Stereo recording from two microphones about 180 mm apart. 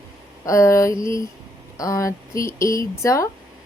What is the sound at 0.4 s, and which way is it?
A woman's voice, 15° left (ahead or behind).